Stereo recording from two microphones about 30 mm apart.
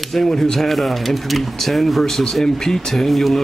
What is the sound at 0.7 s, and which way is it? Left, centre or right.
Speech, centre.